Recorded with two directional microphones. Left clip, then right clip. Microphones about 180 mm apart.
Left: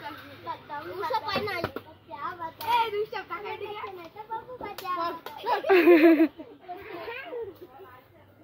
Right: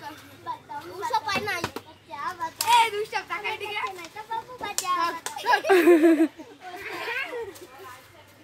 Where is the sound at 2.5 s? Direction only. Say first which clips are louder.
Right 6 dB; 20° right (ahead or behind).